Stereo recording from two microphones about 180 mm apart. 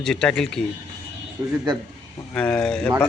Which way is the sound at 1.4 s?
20° right (ahead or behind).